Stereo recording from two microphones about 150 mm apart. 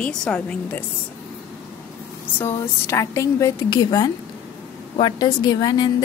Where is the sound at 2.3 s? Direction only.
15° left (ahead or behind).